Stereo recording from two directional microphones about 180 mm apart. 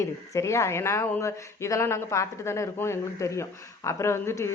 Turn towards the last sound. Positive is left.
turn(degrees=15)  # may be behind; listen again after turning